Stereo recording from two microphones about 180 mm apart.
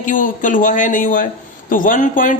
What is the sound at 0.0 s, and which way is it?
Speech, 45° left (ahead or behind).